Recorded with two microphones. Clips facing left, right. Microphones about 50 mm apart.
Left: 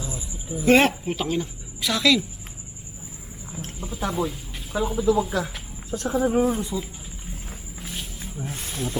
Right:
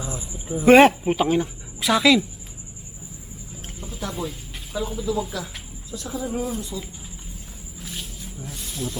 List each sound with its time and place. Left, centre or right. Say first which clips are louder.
0.5 s speech: right 5 dB; centre
3.8 s a sound: left 1 dB; centre
4.1 s speech: left 4 dB; centre
5.9 s speech: left 7 dB; left
8.2 s speech: left 3 dB; left